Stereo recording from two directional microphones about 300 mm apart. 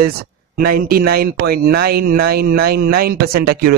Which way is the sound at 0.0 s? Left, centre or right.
Right.